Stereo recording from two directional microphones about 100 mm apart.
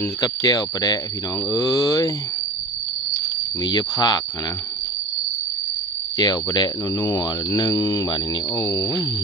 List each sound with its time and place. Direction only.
0.2 s speech: 40° left (ahead or behind)
3.6 s speech: 45° left (ahead or behind)
6.1 s speech: 40° left (ahead or behind)
8.5 s a sound: 25° left (ahead or behind)